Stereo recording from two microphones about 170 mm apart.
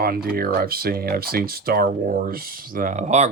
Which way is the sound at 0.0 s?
60° right (ahead or behind).